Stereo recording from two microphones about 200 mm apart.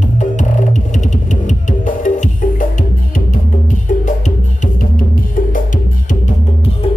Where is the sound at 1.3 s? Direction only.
40° left (ahead or behind).